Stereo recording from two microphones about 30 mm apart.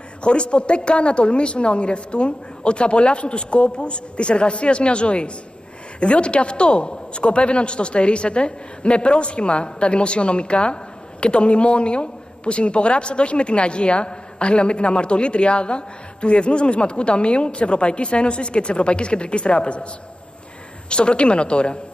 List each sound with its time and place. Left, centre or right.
0.2 s a man's voice: left
20.9 s a man's voice: left